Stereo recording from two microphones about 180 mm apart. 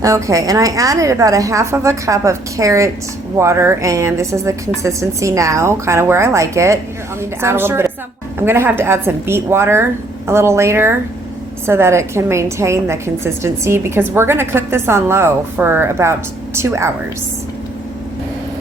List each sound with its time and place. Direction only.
0.0 s a woman's voice: 15° right (ahead or behind)